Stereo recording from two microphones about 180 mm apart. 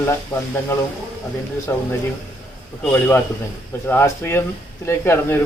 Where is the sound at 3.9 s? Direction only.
15° left (ahead or behind).